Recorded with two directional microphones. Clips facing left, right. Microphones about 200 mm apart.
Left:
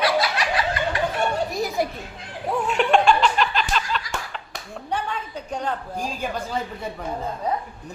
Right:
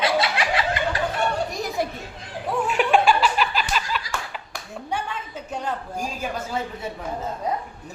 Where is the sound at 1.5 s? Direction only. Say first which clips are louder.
Left 2 dB; centre (ahead or behind).